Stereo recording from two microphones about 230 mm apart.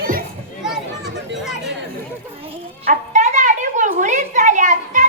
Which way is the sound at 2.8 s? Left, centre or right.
Right.